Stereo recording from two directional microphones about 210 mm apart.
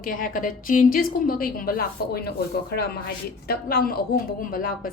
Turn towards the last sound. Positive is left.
turn(degrees=40)  # may be behind; listen again after turning